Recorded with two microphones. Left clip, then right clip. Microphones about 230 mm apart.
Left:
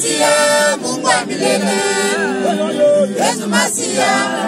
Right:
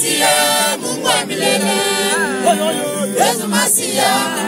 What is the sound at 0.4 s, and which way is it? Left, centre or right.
Music, centre.